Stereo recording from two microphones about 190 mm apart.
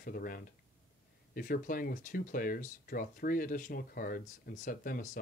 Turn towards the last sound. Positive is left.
turn(degrees=45)  # may be behind; listen again after turning